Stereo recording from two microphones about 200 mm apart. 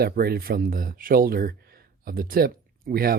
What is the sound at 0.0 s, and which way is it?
Speech, 50° right (ahead or behind).